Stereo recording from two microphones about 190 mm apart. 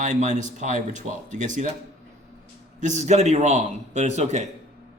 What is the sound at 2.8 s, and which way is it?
Speech, 40° right (ahead or behind).